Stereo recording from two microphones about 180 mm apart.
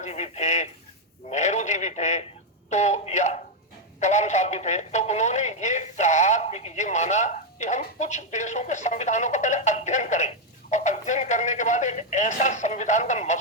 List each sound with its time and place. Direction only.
0.0 s speech: 40° left (ahead or behind)